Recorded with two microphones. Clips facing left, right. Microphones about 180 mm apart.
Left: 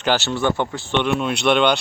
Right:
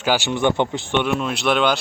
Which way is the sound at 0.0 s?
10° right (ahead or behind).